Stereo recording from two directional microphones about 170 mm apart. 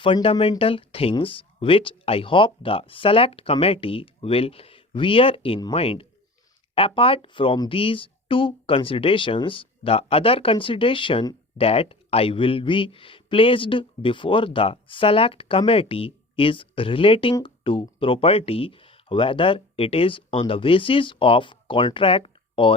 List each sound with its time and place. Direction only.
0.0 s speech: 30° left (ahead or behind)